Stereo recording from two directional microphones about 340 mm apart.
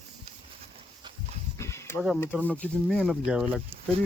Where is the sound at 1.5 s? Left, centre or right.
Centre.